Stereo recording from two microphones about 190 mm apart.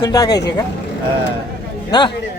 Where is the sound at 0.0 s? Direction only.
20° left (ahead or behind).